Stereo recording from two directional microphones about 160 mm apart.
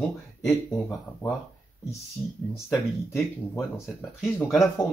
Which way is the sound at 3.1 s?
15° left (ahead or behind).